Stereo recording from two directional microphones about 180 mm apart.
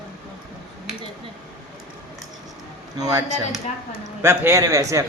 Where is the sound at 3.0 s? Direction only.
20° right (ahead or behind).